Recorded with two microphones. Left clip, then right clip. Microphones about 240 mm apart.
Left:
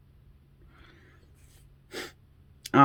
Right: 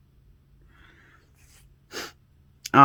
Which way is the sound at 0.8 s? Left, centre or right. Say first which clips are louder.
Right 2 dB; centre.